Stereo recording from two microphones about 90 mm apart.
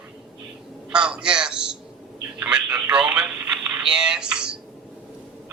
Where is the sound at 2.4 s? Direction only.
10° right (ahead or behind).